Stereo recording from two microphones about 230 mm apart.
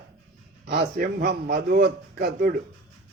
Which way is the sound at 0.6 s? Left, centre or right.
Right.